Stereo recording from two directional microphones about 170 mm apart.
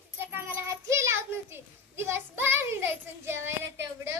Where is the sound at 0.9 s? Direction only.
15° right (ahead or behind).